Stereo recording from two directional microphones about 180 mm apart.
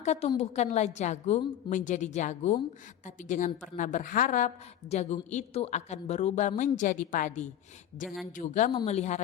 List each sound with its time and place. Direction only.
0.0 s a woman's voice: 35° left (ahead or behind)
8.0 s a woman's voice: centre (ahead or behind)
8.4 s a woman's voice: 45° left (ahead or behind)